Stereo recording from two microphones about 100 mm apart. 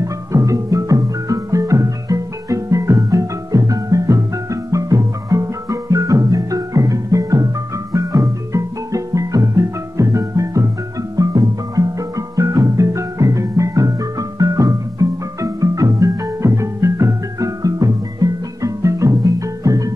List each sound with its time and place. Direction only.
0.0 s music: 35° right (ahead or behind)